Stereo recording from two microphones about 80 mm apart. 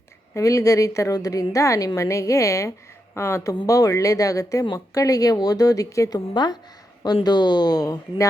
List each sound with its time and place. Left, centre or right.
0.3 s a woman's voice: left